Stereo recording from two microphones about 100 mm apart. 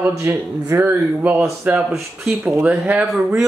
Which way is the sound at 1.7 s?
5° right (ahead or behind).